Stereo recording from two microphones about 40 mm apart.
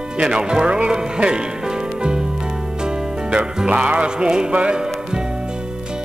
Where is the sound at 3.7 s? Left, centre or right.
Right.